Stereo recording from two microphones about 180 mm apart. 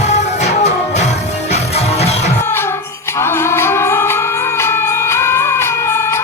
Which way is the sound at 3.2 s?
15° left (ahead or behind).